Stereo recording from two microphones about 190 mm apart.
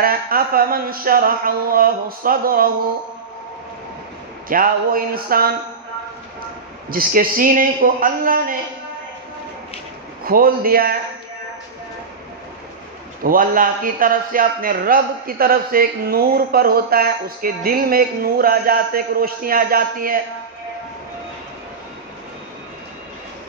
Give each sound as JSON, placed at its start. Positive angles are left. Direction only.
{"t": 0.0, "sound": "a man's voice", "side_deg": -50}
{"t": 4.5, "sound": "a man's voice", "side_deg": -50}
{"t": 6.9, "sound": "a man's voice", "side_deg": -50}
{"t": 10.2, "sound": "a man's voice", "side_deg": -50}
{"t": 13.2, "sound": "a man's voice", "side_deg": -45}